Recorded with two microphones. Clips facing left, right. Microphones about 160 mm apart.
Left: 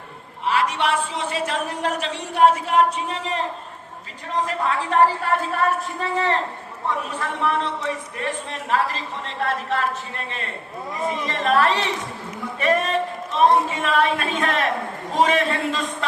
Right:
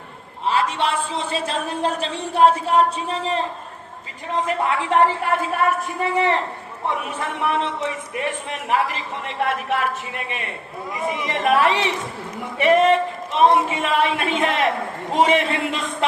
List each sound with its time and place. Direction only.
0.4 s a woman's voice: 30° right (ahead or behind)
4.4 s a woman's voice: 20° right (ahead or behind)